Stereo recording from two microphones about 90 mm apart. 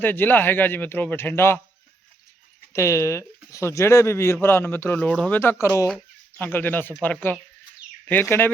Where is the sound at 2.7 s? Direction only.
35° left (ahead or behind); by 5.3 s 15° left (ahead or behind).